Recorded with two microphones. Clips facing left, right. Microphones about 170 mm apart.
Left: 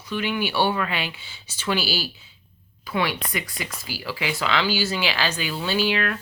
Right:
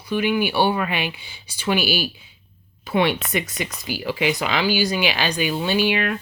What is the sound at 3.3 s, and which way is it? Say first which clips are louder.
Speech: right 5 dB; 20° right (ahead or behind).